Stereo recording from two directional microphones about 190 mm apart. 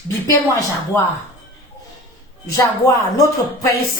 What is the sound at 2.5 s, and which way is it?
Speech, 15° left (ahead or behind).